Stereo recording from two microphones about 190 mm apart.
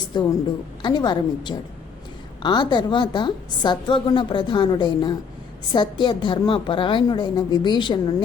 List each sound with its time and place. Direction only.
0.1 s a woman's voice: 25° left (ahead or behind)